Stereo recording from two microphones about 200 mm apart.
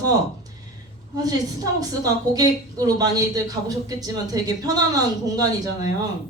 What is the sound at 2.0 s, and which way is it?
A man's voice, 20° right (ahead or behind).